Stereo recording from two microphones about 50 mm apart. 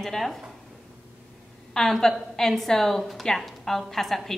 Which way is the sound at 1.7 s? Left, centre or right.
Centre.